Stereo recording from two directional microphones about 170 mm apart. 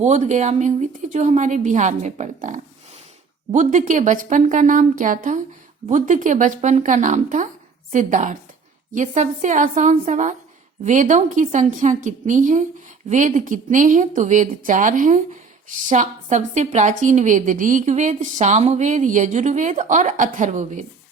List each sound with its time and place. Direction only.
0.0 s a woman's voice: 45° right (ahead or behind)